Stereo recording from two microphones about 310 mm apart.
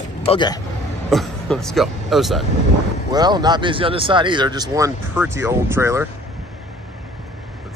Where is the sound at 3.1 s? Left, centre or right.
Centre.